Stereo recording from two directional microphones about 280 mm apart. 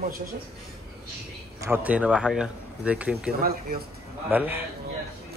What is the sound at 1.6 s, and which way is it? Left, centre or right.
A man's voice, centre.